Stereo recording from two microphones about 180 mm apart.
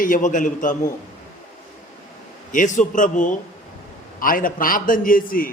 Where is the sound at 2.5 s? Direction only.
45° left (ahead or behind).